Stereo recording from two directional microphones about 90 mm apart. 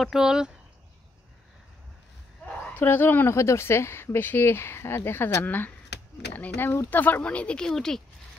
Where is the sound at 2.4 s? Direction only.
20° left (ahead or behind).